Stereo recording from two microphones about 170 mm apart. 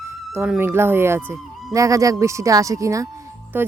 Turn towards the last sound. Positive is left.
turn(degrees=-10)  # may be behind; listen again after turning